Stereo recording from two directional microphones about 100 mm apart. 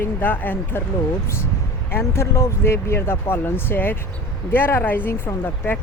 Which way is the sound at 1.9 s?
25° left (ahead or behind).